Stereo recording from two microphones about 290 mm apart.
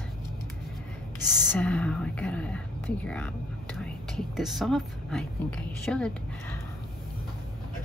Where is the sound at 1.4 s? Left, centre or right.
Centre.